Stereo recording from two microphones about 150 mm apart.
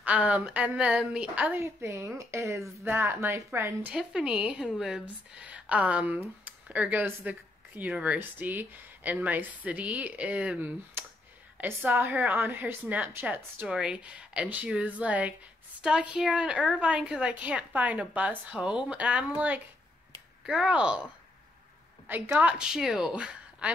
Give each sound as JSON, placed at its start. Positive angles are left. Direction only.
{"t": 0.0, "sound": "speech", "side_deg": -10}
{"t": 3.9, "sound": "a woman's voice", "side_deg": -5}